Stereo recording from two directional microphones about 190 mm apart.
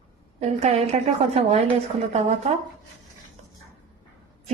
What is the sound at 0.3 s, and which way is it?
Speech, 35° right (ahead or behind).